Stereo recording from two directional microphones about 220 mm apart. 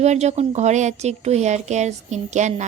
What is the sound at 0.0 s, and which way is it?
A woman's voice, 30° right (ahead or behind).